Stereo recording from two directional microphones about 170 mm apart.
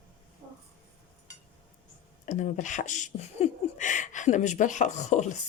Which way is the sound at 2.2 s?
45° left (ahead or behind).